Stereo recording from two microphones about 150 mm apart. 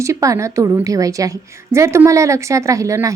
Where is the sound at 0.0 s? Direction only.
20° right (ahead or behind).